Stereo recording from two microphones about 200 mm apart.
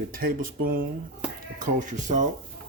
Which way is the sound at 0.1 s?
45° right (ahead or behind).